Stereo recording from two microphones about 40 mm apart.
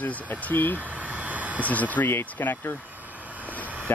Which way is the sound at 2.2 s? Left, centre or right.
Left.